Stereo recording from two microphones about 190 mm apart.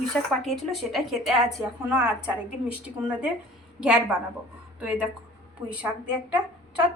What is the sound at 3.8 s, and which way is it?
Speech, 5° right (ahead or behind).